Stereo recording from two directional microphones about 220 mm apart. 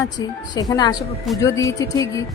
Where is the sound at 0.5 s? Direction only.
20° left (ahead or behind).